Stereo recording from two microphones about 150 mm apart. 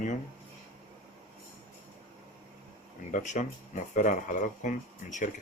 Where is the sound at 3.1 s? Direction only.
55° left (ahead or behind).